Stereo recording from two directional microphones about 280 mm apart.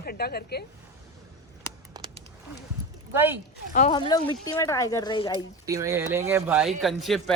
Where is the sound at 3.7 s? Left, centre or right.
Left.